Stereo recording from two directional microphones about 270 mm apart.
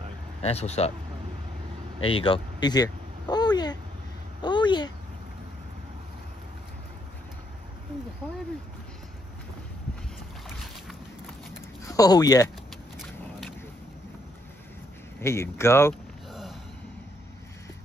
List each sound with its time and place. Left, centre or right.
0.4 s speech: left
2.0 s speech: centre
11.9 s speech: centre
15.1 s a sound: centre